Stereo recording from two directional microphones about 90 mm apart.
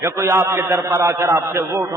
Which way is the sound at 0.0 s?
30° right (ahead or behind).